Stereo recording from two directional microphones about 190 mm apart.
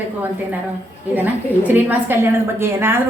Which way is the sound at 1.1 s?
10° right (ahead or behind).